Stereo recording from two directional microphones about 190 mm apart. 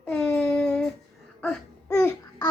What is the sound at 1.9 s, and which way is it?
Babbling, 15° left (ahead or behind).